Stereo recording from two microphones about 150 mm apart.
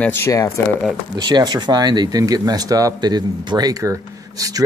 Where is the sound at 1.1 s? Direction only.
30° right (ahead or behind).